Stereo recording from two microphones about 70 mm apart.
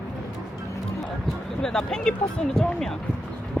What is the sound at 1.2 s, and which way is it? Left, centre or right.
Speech, centre.